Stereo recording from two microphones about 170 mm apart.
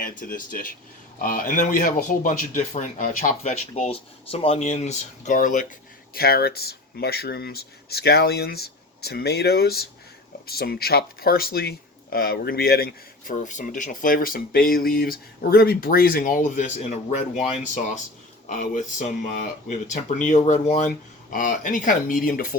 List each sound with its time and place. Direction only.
0.0 s speech: 55° left (ahead or behind)
6.1 s speech: 65° left (ahead or behind)
13.4 s speech: 50° left (ahead or behind)
16.6 s speech: 45° left (ahead or behind)
18.4 s speech: 50° left (ahead or behind)